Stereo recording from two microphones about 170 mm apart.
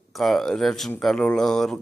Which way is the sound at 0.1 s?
Centre (ahead or behind).